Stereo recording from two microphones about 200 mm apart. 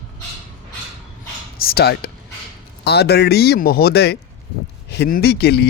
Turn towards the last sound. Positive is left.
turn(degrees=55)  # may be behind; listen again after turning